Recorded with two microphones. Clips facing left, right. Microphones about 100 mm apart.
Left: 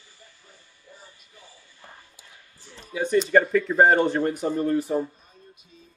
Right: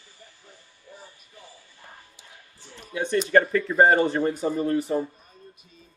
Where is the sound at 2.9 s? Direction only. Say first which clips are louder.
Left 1 dB; centre (ahead or behind).